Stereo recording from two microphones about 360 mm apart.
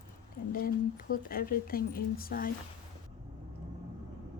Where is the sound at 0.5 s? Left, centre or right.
Left.